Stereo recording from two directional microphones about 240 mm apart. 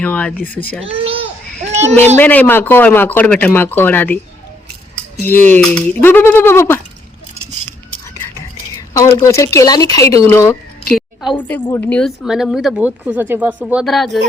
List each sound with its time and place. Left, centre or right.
0.0 s speech: centre
0.9 s a sound: right
2.1 s speech: centre
5.2 s speech: centre
8.4 s speech: centre
10.9 s speech: centre